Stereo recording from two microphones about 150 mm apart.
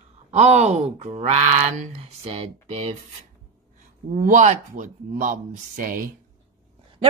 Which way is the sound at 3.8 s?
60° right (ahead or behind).